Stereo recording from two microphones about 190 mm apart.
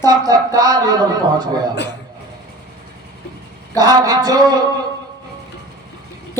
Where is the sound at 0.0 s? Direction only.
20° right (ahead or behind).